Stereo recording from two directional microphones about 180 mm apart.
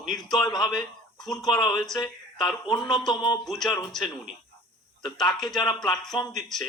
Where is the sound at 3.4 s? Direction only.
Centre (ahead or behind).